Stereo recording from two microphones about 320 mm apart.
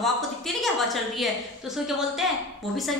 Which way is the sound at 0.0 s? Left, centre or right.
Centre.